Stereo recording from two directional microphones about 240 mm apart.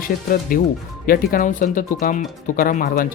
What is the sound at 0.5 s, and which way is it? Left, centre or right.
Speech, left.